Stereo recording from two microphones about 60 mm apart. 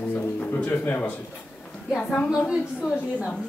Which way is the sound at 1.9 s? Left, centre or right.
Left.